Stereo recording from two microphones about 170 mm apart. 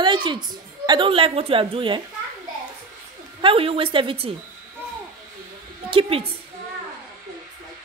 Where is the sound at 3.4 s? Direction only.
35° right (ahead or behind).